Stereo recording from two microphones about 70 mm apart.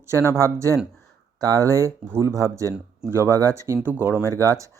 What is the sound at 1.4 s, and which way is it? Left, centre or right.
Speech, right.